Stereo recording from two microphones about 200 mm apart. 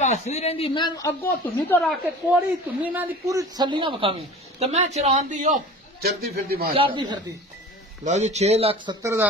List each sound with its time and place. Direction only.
0.0 s a man's voice: 35° left (ahead or behind); by 2.0 s 5° left (ahead or behind)
2.8 s a man's voice: 10° right (ahead or behind); by 5.6 s 35° right (ahead or behind)
6.0 s a man's voice: 50° right (ahead or behind)
6.7 s a man's voice: 25° right (ahead or behind)
8.0 s speech: 35° right (ahead or behind)
9.0 s speech: 15° right (ahead or behind)